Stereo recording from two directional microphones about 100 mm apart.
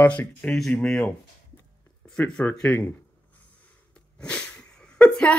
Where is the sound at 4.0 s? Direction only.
10° left (ahead or behind).